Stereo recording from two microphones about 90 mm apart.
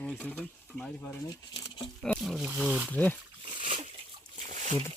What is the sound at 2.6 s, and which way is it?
Speech, 20° right (ahead or behind).